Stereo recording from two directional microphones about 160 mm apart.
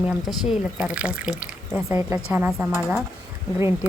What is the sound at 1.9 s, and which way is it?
A woman's voice, 15° right (ahead or behind).